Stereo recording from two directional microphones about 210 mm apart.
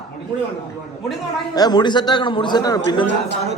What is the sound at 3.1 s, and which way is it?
Speech, 55° left (ahead or behind).